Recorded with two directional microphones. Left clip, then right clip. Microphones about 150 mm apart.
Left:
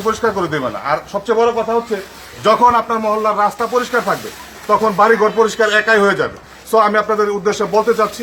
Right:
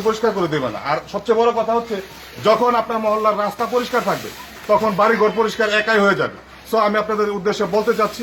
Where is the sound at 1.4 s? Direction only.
Centre (ahead or behind).